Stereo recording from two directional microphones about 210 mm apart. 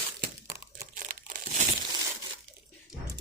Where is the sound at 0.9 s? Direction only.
40° right (ahead or behind).